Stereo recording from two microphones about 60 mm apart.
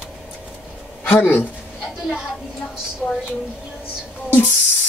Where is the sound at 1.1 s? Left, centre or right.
Left.